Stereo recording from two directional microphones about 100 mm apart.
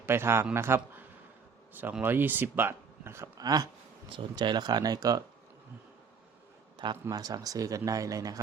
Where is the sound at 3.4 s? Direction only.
40° right (ahead or behind).